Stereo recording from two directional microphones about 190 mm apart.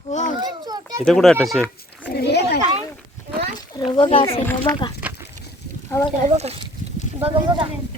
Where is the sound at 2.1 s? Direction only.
60° left (ahead or behind).